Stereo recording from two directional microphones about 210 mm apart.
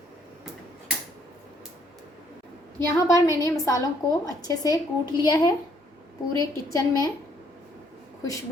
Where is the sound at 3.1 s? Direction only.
15° left (ahead or behind).